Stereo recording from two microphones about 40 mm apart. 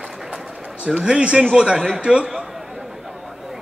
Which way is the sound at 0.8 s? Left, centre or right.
Right.